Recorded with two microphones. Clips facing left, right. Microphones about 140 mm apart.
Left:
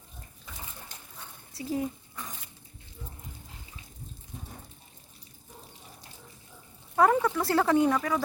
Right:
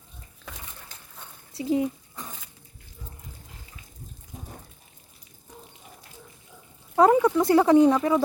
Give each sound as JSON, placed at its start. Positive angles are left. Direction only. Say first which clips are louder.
{"t": 1.5, "sound": "speech", "louder": "right 7 dB", "side_deg": -20}
{"t": 6.9, "sound": "speech", "louder": "right 5 dB", "side_deg": -20}